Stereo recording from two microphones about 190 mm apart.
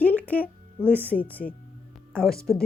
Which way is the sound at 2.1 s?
Centre (ahead or behind).